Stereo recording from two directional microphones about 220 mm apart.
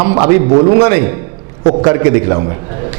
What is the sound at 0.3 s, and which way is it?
A man's voice, 15° right (ahead or behind).